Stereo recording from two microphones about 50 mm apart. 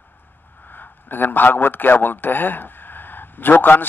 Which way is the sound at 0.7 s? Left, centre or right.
Left.